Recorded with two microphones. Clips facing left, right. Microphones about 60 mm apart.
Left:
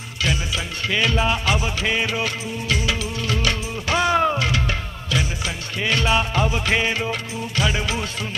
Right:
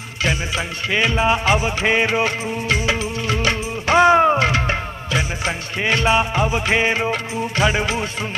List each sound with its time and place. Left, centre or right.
0.2 s music: right